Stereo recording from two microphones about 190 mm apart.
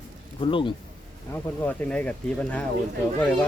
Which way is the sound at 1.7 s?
5° left (ahead or behind).